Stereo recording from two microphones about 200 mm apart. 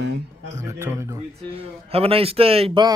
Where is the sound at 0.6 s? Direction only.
15° right (ahead or behind).